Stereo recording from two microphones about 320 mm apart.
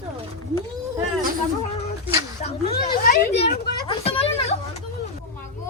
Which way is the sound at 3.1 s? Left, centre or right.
Left.